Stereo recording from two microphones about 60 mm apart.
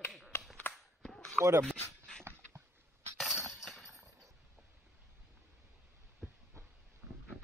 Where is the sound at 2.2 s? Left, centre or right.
Right.